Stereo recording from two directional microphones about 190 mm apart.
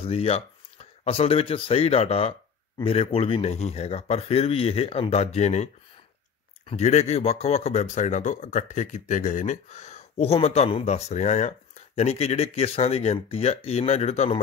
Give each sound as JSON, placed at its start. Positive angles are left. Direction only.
{"t": 0.0, "sound": "speech", "side_deg": 30}
{"t": 6.7, "sound": "speech", "side_deg": 35}